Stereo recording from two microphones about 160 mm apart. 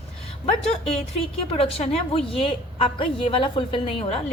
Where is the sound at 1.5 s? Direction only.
35° left (ahead or behind).